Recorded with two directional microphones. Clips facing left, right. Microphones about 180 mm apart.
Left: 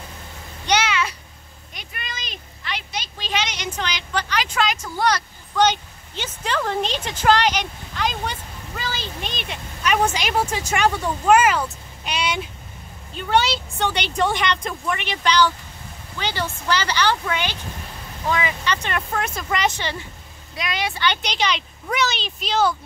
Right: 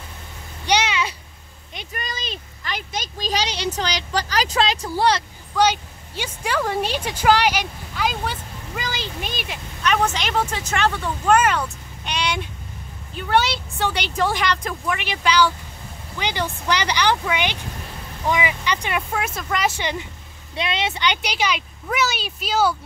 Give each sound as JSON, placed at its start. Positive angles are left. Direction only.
{"t": 0.7, "sound": "babbling", "side_deg": -10}
{"t": 1.9, "sound": "a sound", "side_deg": -40}
{"t": 2.7, "sound": "speech", "side_deg": -45}
{"t": 5.6, "sound": "a woman's voice", "side_deg": -10}
{"t": 9.8, "sound": "a woman's voice", "side_deg": 10}
{"t": 19.8, "sound": "speech", "side_deg": -15}